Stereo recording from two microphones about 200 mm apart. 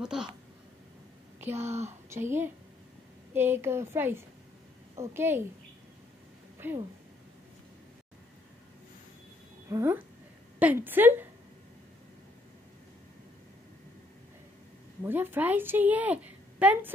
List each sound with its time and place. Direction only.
0.0 s speech: 5° right (ahead or behind)
1.4 s speech: 10° right (ahead or behind)
1.7 s speech: 35° right (ahead or behind)
2.0 s a woman's voice: 10° right (ahead or behind)
6.6 s a woman's voice: 10° right (ahead or behind)
9.7 s a woman's voice: 15° right (ahead or behind)
15.0 s a woman's voice: 10° right (ahead or behind)